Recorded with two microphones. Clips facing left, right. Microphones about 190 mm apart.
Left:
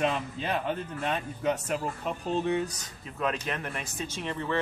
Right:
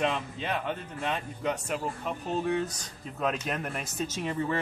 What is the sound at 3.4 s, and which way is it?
Speech, 5° right (ahead or behind).